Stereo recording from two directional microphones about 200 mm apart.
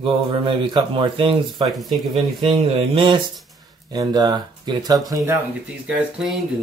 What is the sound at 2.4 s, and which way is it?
Speech, 25° right (ahead or behind).